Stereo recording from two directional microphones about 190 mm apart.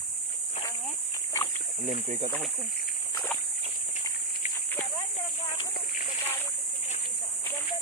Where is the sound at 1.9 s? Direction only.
35° right (ahead or behind).